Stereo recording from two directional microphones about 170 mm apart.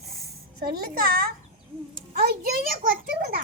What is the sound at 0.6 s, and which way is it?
A child's voice, 65° right (ahead or behind).